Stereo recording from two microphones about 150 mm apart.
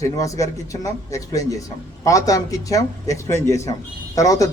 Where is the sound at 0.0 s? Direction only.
20° left (ahead or behind).